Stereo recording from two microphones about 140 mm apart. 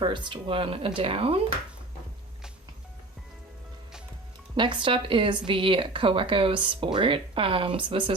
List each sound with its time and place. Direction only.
0.0 s speech: 35° right (ahead or behind)
4.5 s speech: 35° right (ahead or behind)